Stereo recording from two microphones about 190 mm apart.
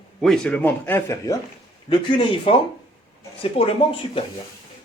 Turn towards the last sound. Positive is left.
turn(degrees=30)  # may be behind; listen again after turning